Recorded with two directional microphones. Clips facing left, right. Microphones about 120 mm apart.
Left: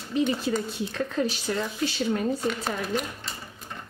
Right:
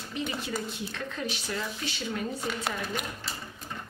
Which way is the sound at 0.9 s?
40° left (ahead or behind).